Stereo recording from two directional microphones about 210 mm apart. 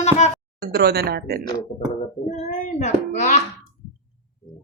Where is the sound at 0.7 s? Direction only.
50° right (ahead or behind).